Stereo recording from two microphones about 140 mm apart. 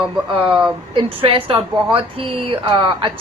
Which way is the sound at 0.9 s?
40° right (ahead or behind).